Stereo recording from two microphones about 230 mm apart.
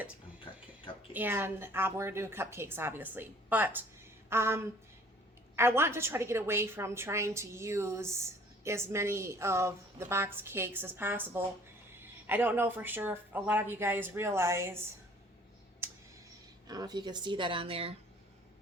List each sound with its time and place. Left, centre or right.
1.1 s a woman's voice: centre
15.8 s a sound: centre
16.6 s speech: centre